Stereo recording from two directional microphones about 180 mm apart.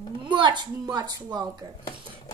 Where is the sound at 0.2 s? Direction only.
25° right (ahead or behind).